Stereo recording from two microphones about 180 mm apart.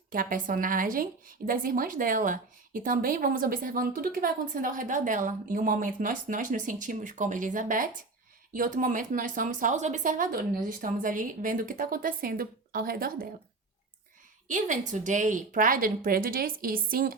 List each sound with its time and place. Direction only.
0.1 s speech: 50° right (ahead or behind)
14.4 s speech: 45° right (ahead or behind)